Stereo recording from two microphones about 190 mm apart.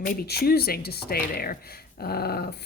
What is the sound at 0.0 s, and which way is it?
Speech, 55° left (ahead or behind).